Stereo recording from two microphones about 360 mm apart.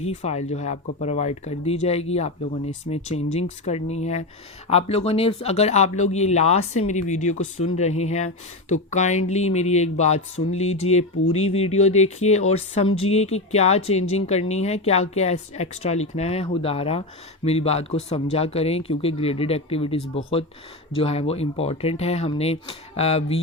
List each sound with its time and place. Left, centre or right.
0.0 s speech: centre